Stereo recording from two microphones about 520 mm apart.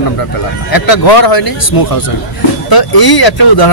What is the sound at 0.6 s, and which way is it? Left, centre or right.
Speech, left.